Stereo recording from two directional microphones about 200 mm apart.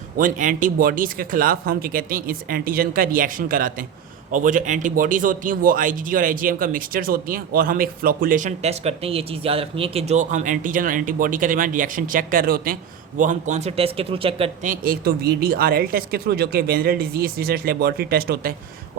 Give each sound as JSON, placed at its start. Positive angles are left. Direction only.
{"t": 0.2, "sound": "a man's voice", "side_deg": -40}
{"t": 14.7, "sound": "speech", "side_deg": -50}